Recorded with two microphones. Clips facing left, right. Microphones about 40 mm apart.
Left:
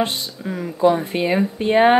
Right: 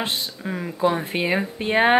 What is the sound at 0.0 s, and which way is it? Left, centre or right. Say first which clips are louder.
Speech: left 4 dB; centre.